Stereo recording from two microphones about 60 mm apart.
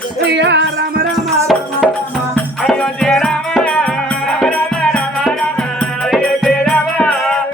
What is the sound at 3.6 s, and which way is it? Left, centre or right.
Music, centre.